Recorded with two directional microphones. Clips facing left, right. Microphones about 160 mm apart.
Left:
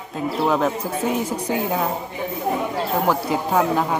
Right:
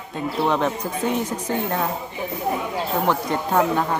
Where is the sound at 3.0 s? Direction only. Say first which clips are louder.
Left 1 dB; 5° left (ahead or behind).